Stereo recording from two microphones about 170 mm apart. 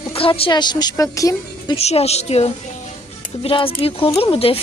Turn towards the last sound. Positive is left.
turn(degrees=35)  # may be behind; listen again after turning